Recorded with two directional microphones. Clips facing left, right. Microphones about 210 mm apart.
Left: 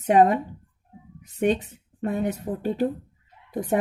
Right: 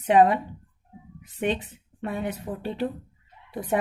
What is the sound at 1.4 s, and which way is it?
Speech, 45° left (ahead or behind).